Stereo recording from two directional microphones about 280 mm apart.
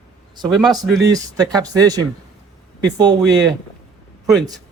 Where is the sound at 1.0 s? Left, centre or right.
Centre.